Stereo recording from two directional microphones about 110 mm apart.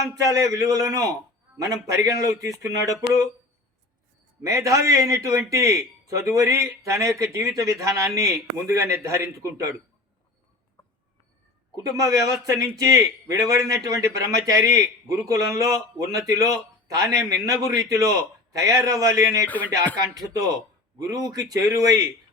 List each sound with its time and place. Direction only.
0.2 s a man's voice: 30° right (ahead or behind)
4.4 s a man's voice: 30° right (ahead or behind)
11.7 s a man's voice: 30° right (ahead or behind)
19.5 s speech: 15° left (ahead or behind)
20.1 s a man's voice: 35° right (ahead or behind)